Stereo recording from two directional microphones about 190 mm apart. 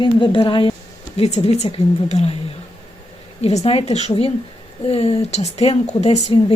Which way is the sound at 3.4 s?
35° left (ahead or behind).